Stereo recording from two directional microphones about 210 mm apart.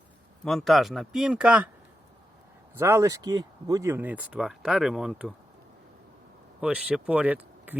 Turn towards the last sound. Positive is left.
turn(degrees=-10)  # may be behind; listen again after turning